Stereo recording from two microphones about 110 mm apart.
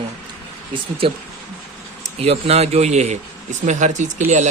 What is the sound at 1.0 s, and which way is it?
Speech, 60° right (ahead or behind).